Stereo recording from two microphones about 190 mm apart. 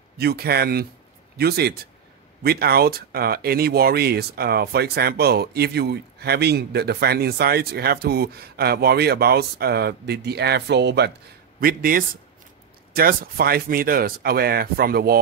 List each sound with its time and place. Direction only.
0.2 s speech: 55° right (ahead or behind)
11.6 s speech: 50° right (ahead or behind)